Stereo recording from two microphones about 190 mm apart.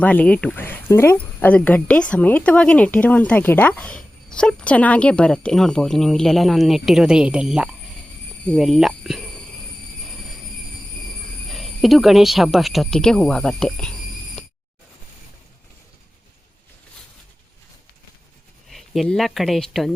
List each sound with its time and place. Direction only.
0.0 s speech: 5° left (ahead or behind)
11.5 s speech: centre (ahead or behind)
18.7 s speech: centre (ahead or behind)